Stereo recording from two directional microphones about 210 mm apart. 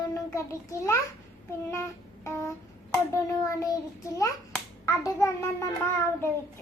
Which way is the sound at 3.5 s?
15° left (ahead or behind).